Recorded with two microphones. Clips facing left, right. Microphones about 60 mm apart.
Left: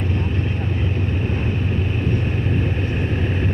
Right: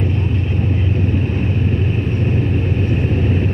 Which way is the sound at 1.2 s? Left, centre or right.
Right.